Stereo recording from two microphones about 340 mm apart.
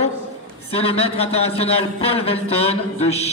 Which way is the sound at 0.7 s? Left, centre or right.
Centre.